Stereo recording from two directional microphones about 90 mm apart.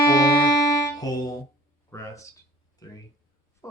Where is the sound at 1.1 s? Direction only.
45° left (ahead or behind).